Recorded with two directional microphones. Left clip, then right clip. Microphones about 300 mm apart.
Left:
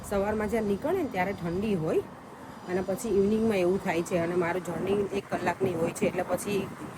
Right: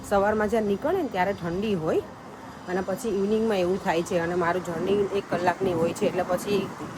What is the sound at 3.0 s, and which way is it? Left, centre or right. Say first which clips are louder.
Speech: left 3 dB; centre.